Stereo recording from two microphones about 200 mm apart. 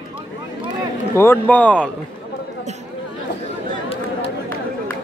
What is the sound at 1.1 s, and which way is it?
Speech, 15° left (ahead or behind).